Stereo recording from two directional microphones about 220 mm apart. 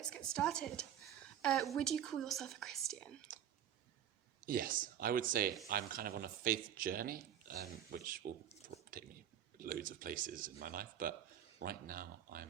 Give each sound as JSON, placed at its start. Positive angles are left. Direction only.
{"t": 0.0, "sound": "speech", "side_deg": 5}
{"t": 3.3, "sound": "a sound", "side_deg": -40}
{"t": 4.4, "sound": "speech", "side_deg": -40}